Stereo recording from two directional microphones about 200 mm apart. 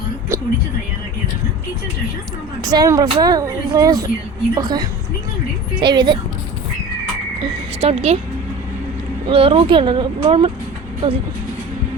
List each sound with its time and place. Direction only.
0.3 s a sound: 15° right (ahead or behind)
2.6 s speech: 20° right (ahead or behind)
7.8 s speech: 30° right (ahead or behind)
9.3 s speech: 30° right (ahead or behind)